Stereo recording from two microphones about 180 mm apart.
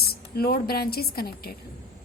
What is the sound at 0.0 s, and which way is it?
A woman's voice, 60° left (ahead or behind).